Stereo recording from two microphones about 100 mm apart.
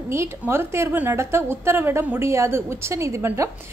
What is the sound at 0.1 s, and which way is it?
A woman's voice, 25° right (ahead or behind).